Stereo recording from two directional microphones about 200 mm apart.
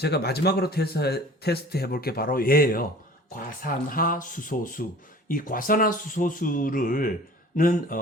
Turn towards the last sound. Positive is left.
turn(degrees=40)  # may be behind; listen again after turning